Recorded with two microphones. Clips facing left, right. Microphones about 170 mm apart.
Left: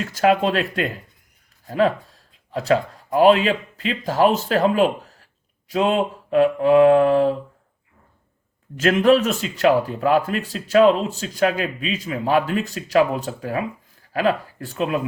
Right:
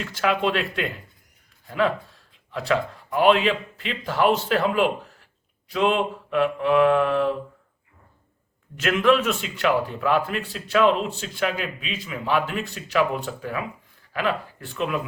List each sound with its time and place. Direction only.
0.0 s a man's voice: 45° left (ahead or behind)
8.7 s speech: 40° left (ahead or behind)